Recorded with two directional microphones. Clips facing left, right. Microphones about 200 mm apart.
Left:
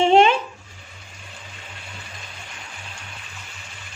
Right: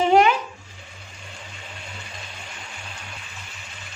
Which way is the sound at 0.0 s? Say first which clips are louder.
Left 2 dB; 25° left (ahead or behind).